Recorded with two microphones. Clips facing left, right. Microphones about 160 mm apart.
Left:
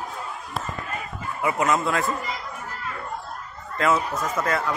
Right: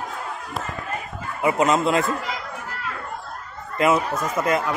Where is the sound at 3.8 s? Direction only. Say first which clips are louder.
Right 3 dB; 15° right (ahead or behind).